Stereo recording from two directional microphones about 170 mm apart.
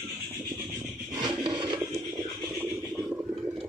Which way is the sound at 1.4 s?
25° right (ahead or behind).